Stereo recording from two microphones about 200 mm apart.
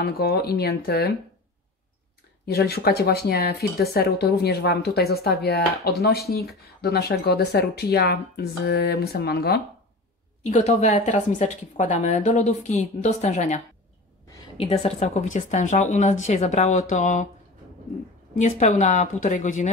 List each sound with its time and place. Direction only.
0.0 s speech: 50° left (ahead or behind)
2.4 s speech: 55° left (ahead or behind)
10.4 s a woman's voice: 35° left (ahead or behind)
14.6 s a woman's voice: 30° left (ahead or behind)
18.4 s a woman's voice: 35° left (ahead or behind)